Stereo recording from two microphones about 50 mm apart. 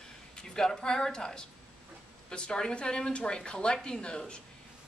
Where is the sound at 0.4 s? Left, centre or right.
Centre.